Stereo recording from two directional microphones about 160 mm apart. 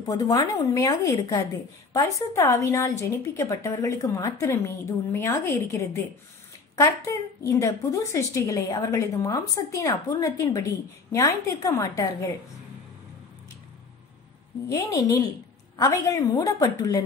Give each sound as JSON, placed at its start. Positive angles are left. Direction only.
{"t": 0.1, "sound": "a woman's voice", "side_deg": 25}
{"t": 7.4, "sound": "a woman's voice", "side_deg": 20}
{"t": 14.7, "sound": "a woman's voice", "side_deg": 20}